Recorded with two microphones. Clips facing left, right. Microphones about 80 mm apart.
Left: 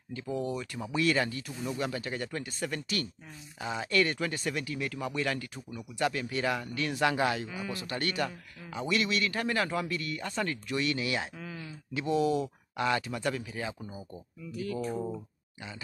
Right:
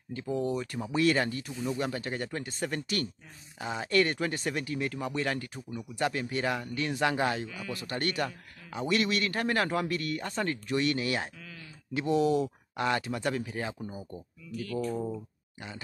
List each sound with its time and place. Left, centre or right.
0.1 s speech: right
7.4 s speech: left
7.8 s speech: right
11.3 s speech: left
11.9 s speech: right
13.7 s speech: centre
14.5 s speech: left